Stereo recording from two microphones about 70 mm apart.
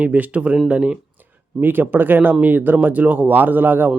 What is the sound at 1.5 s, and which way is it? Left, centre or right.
Speech, right.